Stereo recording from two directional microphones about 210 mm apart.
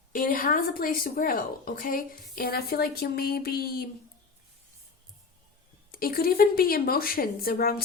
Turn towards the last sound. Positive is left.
turn(degrees=45)  # may be behind; listen again after turning